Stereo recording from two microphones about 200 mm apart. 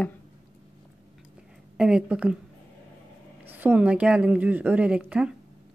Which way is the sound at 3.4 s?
10° right (ahead or behind).